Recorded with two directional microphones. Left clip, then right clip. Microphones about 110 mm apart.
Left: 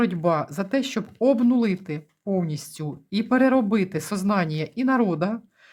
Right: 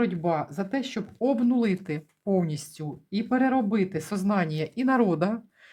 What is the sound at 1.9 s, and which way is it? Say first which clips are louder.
Speech: even; centre (ahead or behind).